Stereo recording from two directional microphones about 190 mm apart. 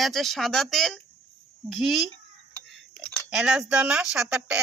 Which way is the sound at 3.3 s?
5° right (ahead or behind).